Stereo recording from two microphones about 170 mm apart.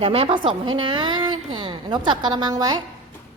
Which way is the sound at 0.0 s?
35° right (ahead or behind).